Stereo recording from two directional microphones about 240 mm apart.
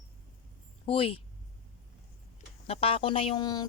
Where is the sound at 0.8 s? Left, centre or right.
Left.